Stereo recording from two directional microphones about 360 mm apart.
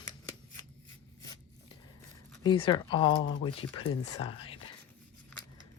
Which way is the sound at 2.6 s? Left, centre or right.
Centre.